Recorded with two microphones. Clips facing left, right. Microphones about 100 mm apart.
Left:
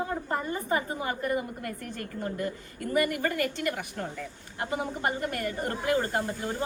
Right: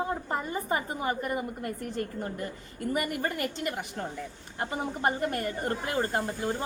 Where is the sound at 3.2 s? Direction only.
25° right (ahead or behind).